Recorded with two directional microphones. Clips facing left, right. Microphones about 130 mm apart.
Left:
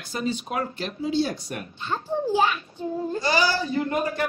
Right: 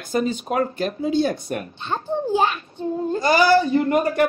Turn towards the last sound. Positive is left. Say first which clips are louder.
# right 6 dB
turn(degrees=-55)  # may be behind; listen again after turning